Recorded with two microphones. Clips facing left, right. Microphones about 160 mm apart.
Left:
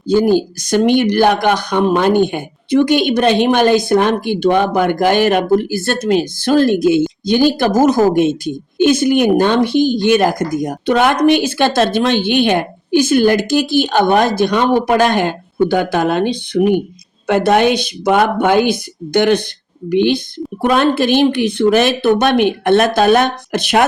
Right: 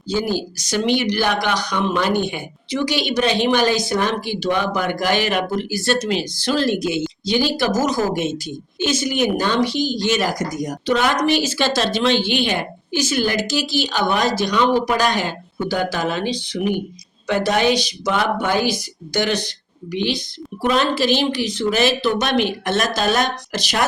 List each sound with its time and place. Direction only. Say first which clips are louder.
0.1 s speech: left 9 dB; 50° left (ahead or behind)